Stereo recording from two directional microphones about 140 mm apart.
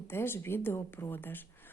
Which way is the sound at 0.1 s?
15° left (ahead or behind).